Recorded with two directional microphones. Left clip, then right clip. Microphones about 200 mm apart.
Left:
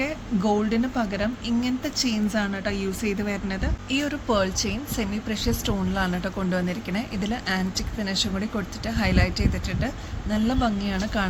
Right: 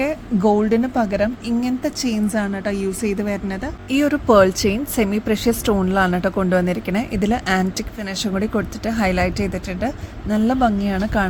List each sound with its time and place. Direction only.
0.0 s speech: 45° right (ahead or behind)